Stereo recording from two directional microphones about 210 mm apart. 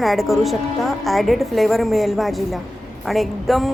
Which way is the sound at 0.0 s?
Centre (ahead or behind).